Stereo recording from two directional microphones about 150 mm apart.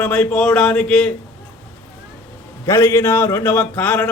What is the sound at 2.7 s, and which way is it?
A man's voice, 15° left (ahead or behind).